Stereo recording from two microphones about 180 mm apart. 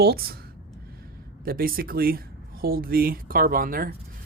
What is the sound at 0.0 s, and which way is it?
Speech, 60° right (ahead or behind).